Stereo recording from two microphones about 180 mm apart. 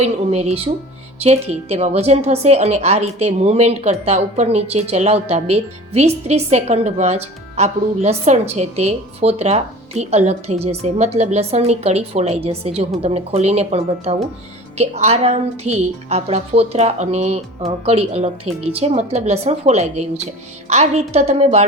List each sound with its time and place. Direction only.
0.0 s a woman's voice: 35° right (ahead or behind)